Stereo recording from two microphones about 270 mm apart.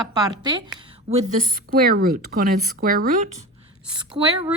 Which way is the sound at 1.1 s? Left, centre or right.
Right.